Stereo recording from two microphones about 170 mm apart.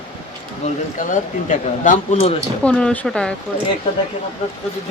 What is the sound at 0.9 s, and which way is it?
Speech, 50° left (ahead or behind).